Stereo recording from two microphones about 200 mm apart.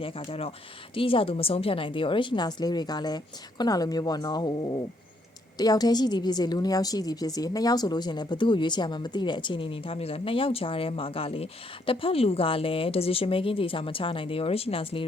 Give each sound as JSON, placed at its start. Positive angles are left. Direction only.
{"t": 0.0, "sound": "a woman's voice", "side_deg": 30}